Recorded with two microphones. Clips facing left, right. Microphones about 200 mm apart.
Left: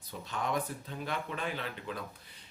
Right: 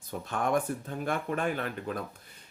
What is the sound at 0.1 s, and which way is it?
Speech, 50° right (ahead or behind).